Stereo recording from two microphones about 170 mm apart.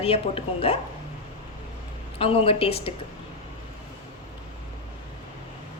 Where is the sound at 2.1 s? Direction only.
35° left (ahead or behind).